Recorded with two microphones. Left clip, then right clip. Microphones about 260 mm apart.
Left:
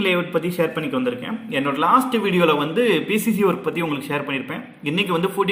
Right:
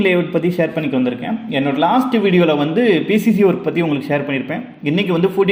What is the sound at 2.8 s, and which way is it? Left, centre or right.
A man's voice, centre.